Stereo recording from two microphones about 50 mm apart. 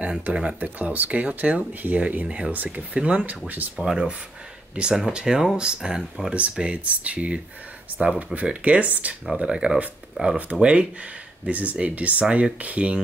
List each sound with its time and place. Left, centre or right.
0.2 s speech: right
3.7 s speech: centre
6.6 s speech: right
9.4 s speech: right